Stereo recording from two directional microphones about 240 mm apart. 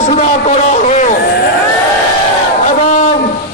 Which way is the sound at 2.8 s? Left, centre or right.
Left.